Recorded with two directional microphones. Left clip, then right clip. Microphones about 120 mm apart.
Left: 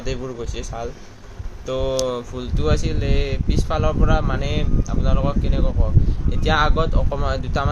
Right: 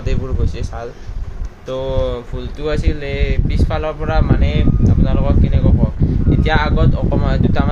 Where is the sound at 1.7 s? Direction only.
35° left (ahead or behind).